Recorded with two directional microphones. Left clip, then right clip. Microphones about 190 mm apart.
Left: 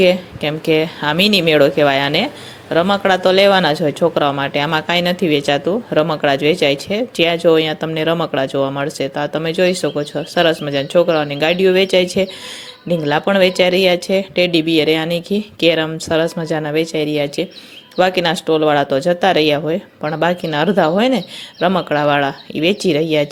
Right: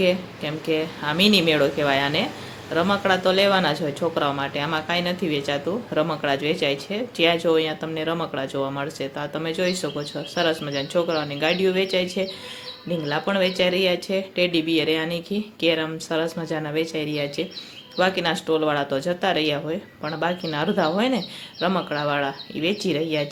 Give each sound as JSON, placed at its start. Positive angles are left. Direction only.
{"t": 0.0, "sound": "speech", "side_deg": 40}